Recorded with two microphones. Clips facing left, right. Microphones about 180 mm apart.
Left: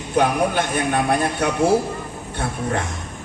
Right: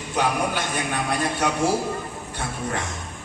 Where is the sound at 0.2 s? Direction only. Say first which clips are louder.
Left 5 dB; 55° left (ahead or behind).